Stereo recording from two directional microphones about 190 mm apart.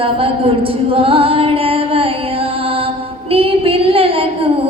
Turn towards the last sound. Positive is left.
turn(degrees=-30)  # may be behind; listen again after turning